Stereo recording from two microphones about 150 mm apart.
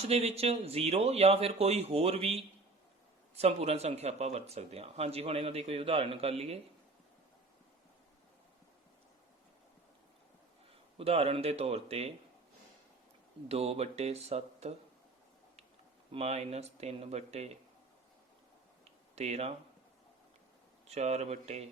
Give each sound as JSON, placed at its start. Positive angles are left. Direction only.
{"t": 0.0, "sound": "speech", "side_deg": -45}
{"t": 10.9, "sound": "speech", "side_deg": -40}
{"t": 13.5, "sound": "speech", "side_deg": -40}
{"t": 16.1, "sound": "speech", "side_deg": -45}
{"t": 19.1, "sound": "speech", "side_deg": -45}
{"t": 20.8, "sound": "speech", "side_deg": -45}